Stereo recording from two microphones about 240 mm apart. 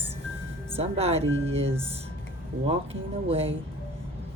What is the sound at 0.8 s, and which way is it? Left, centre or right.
Speech, right.